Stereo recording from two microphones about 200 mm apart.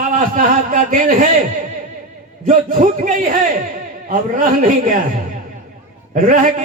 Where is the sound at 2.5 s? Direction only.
40° right (ahead or behind).